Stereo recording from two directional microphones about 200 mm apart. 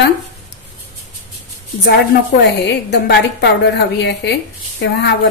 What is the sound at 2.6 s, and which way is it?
A woman's voice, 60° left (ahead or behind).